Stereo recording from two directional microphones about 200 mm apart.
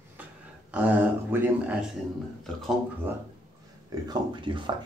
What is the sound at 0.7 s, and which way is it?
Speech, 10° right (ahead or behind).